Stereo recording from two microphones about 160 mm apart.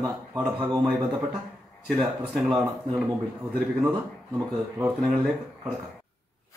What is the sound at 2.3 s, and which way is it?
Speech, 5° right (ahead or behind).